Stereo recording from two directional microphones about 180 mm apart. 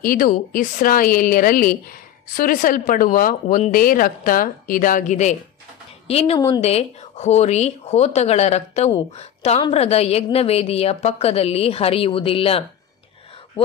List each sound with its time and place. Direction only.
0.0 s a woman's voice: 50° left (ahead or behind); by 12.6 s 30° left (ahead or behind)